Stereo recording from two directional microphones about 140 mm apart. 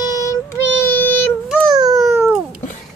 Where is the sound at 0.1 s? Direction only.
25° left (ahead or behind).